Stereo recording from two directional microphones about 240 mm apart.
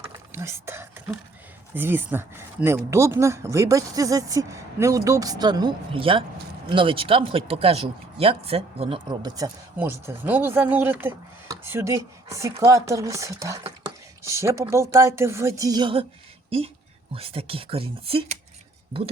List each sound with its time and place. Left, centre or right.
0.3 s speech: centre
17.2 s speech: right